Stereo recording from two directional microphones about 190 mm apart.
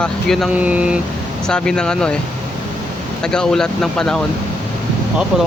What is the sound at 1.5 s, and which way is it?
Speech, 5° left (ahead or behind).